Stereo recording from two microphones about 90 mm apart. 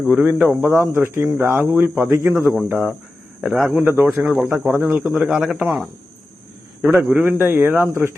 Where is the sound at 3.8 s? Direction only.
20° right (ahead or behind).